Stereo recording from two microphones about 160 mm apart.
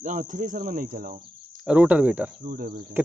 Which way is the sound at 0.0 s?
55° right (ahead or behind).